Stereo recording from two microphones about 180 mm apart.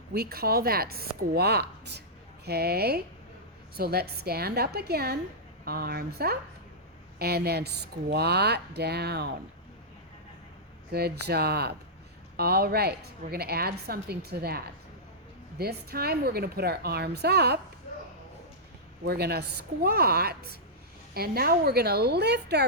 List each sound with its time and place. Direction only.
0.1 s a woman's voice: 60° right (ahead or behind)
10.9 s a woman's voice: 60° right (ahead or behind)
19.0 s a woman's voice: 60° right (ahead or behind)